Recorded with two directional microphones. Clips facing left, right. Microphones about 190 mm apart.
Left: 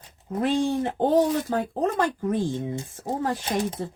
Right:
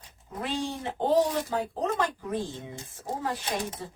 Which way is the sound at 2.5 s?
25° left (ahead or behind).